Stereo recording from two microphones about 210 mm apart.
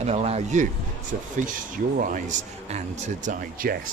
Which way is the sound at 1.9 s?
35° right (ahead or behind).